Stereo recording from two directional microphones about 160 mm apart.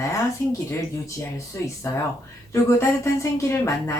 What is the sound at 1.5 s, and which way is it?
A woman's voice, 20° left (ahead or behind).